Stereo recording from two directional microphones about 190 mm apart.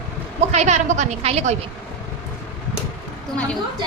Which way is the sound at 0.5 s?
40° right (ahead or behind).